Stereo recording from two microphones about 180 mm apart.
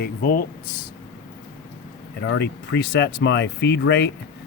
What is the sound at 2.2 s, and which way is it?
Speech, 65° left (ahead or behind).